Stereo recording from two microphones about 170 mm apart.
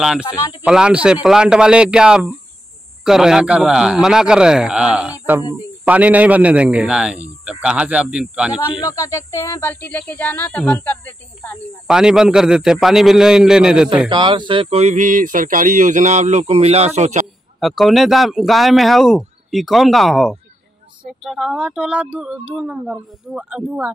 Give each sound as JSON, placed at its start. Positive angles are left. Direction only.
{"t": 0.0, "sound": "a man's voice", "side_deg": -5}
{"t": 8.8, "sound": "speech", "side_deg": 20}
{"t": 11.9, "sound": "speech", "side_deg": -5}
{"t": 14.0, "sound": "speech", "side_deg": -30}
{"t": 17.6, "sound": "speech", "side_deg": 0}